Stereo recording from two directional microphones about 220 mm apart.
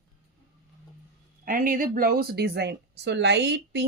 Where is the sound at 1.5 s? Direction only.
40° right (ahead or behind).